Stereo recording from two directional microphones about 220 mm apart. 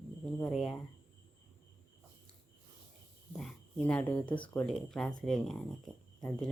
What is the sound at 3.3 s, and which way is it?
Speech, centre (ahead or behind).